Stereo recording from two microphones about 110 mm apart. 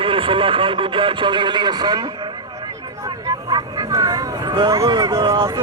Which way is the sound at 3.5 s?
35° right (ahead or behind).